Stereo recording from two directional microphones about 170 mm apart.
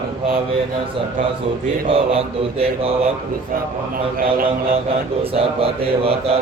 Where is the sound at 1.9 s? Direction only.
35° right (ahead or behind).